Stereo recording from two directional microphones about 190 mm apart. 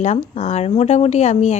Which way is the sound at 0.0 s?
35° left (ahead or behind).